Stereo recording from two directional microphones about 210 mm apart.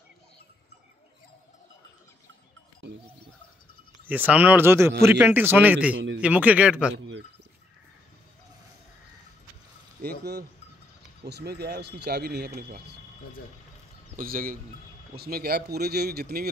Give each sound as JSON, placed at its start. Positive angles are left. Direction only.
{"t": 4.1, "sound": "a man's voice", "side_deg": -5}
{"t": 5.9, "sound": "a man's voice", "side_deg": -65}
{"t": 6.2, "sound": "speech", "side_deg": -5}
{"t": 10.0, "sound": "speech", "side_deg": -50}
{"t": 14.1, "sound": "speech", "side_deg": -40}